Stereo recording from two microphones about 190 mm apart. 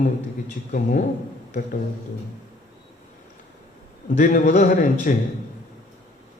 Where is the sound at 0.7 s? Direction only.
45° left (ahead or behind).